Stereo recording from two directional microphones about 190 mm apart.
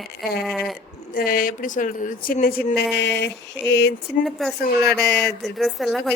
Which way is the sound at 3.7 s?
65° left (ahead or behind).